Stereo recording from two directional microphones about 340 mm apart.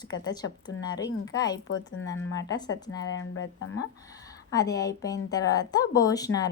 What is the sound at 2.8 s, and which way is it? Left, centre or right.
Speech, centre.